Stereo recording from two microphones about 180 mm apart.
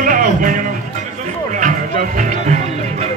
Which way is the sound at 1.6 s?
45° right (ahead or behind).